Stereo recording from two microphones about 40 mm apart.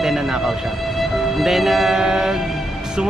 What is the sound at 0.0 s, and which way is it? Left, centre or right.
Music, centre.